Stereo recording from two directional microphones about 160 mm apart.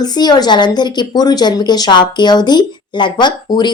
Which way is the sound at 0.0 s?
25° left (ahead or behind).